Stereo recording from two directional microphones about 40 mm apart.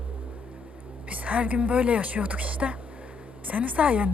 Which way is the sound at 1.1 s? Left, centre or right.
Right.